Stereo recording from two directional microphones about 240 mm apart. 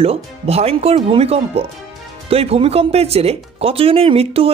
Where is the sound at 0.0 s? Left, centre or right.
Right.